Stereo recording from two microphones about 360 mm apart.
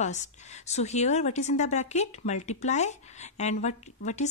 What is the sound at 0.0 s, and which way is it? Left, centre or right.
A woman's voice, centre.